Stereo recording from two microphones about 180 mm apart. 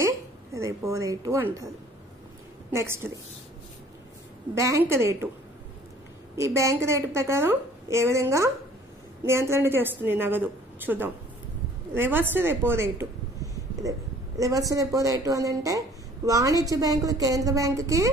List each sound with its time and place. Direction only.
0.0 s a woman's voice: 15° right (ahead or behind)
2.7 s a woman's voice: 15° right (ahead or behind)
4.6 s a woman's voice: 15° right (ahead or behind)
6.3 s a woman's voice: 15° right (ahead or behind)